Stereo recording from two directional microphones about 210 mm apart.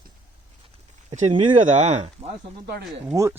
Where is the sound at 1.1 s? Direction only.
30° right (ahead or behind).